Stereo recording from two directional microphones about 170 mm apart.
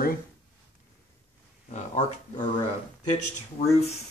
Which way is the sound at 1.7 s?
45° left (ahead or behind).